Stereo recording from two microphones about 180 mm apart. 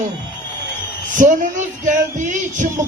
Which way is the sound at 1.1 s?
45° right (ahead or behind).